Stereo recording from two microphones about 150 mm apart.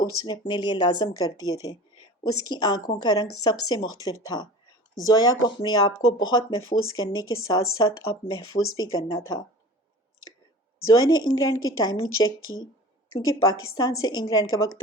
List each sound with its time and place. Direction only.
0.0 s speech: 30° left (ahead or behind)
10.9 s speech: 25° left (ahead or behind)